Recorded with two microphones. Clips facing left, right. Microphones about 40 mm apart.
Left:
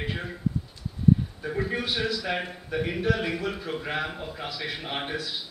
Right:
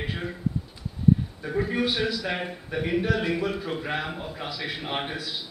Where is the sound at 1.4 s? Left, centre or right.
Centre.